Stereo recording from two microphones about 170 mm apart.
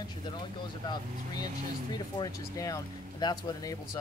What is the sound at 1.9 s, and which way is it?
Speech, 20° left (ahead or behind).